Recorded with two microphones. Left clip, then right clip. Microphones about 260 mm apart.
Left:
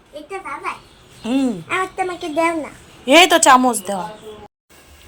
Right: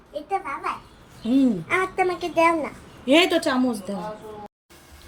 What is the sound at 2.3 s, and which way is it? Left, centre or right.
A woman's voice, left.